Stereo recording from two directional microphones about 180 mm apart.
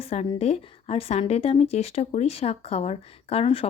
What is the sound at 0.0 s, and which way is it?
A woman's voice, 35° left (ahead or behind).